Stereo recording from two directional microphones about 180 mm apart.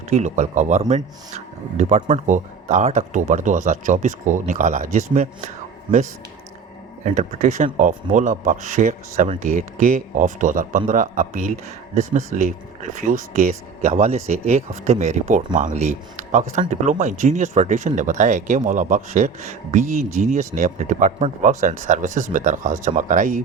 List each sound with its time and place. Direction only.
0.1 s speech: 40° right (ahead or behind)
7.0 s speech: 40° right (ahead or behind)